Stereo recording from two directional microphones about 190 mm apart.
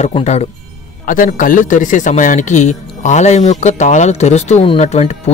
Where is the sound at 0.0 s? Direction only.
35° left (ahead or behind).